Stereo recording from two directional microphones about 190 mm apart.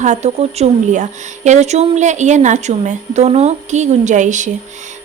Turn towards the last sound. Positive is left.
turn(degrees=-40)  # may be behind; listen again after turning